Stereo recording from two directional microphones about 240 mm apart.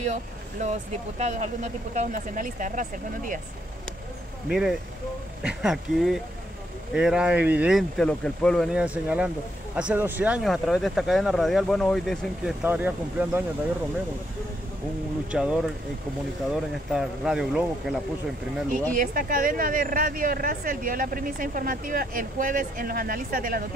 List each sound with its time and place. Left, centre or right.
0.1 s a woman's voice: right
4.5 s speech: centre
15.3 s speech: centre
16.9 s speech: centre
18.9 s a woman's voice: right